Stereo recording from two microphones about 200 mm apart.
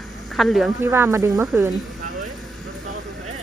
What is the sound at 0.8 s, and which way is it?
Speech, 15° right (ahead or behind).